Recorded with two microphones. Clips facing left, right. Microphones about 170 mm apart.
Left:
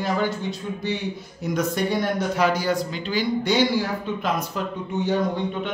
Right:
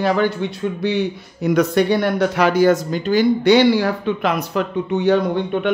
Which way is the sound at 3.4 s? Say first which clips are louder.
Right 8 dB; 70° right (ahead or behind).